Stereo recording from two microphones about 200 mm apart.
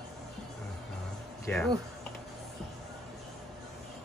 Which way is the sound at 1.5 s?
5° left (ahead or behind).